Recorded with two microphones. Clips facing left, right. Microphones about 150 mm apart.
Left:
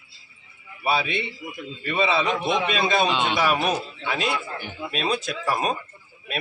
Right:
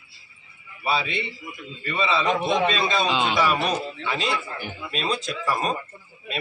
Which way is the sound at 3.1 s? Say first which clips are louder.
Right 1 dB; 5° right (ahead or behind).